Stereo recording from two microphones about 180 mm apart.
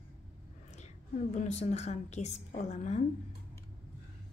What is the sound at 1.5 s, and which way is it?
Speech, 40° left (ahead or behind).